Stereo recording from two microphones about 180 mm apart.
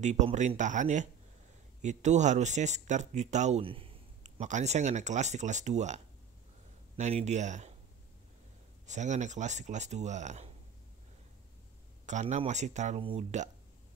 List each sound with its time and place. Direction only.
0.0 s speech: 40° right (ahead or behind)
7.0 s speech: 40° right (ahead or behind)
8.8 s speech: 40° right (ahead or behind)
12.1 s speech: 40° right (ahead or behind)